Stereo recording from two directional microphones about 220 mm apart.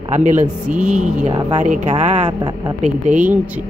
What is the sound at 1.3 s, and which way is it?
Speech, 20° right (ahead or behind).